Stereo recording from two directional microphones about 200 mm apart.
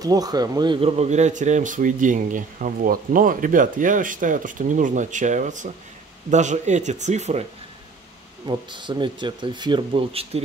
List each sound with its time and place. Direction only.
0.0 s speech: 20° right (ahead or behind); by 7.4 s 35° right (ahead or behind)
8.5 s speech: 25° right (ahead or behind)